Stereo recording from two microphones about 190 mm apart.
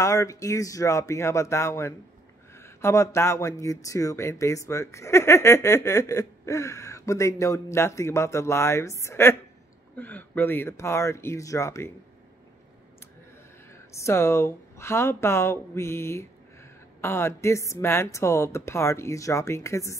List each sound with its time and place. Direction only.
0.0 s speech: 15° left (ahead or behind)
13.7 s speech: 15° left (ahead or behind)